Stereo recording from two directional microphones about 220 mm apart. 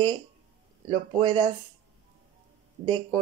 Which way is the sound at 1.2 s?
20° right (ahead or behind).